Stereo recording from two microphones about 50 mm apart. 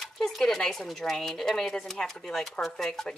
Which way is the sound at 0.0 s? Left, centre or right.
Centre.